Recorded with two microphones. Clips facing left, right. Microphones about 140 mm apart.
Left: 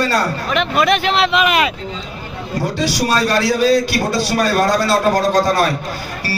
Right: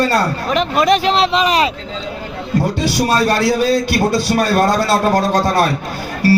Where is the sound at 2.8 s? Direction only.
55° right (ahead or behind).